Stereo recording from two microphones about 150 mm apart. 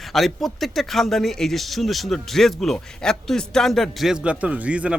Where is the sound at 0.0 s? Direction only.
Centre (ahead or behind).